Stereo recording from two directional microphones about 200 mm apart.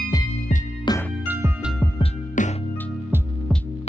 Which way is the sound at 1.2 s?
10° right (ahead or behind).